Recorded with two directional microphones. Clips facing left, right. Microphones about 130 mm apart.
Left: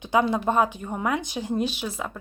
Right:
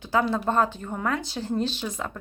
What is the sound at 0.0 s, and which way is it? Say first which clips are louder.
Speech: left 2 dB; 15° left (ahead or behind).